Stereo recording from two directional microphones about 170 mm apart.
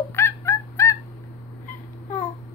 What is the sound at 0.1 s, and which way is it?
Fowl, 15° left (ahead or behind).